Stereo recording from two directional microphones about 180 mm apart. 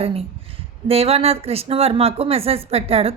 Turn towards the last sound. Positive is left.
turn(degrees=-35)  # may be behind; listen again after turning